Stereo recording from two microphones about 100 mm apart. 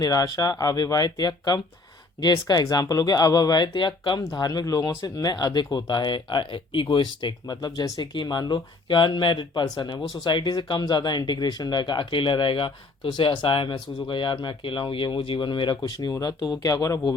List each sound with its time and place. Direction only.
0.0 s speech: 35° left (ahead or behind)
4.2 s speech: 40° left (ahead or behind); by 9.6 s 55° left (ahead or behind)
9.6 s speech: 45° left (ahead or behind)
15.9 s speech: 40° left (ahead or behind)